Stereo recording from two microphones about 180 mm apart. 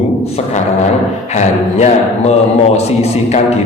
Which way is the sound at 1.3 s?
40° left (ahead or behind).